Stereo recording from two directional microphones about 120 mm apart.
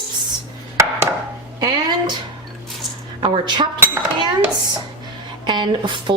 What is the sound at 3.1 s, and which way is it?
Speech, 45° right (ahead or behind).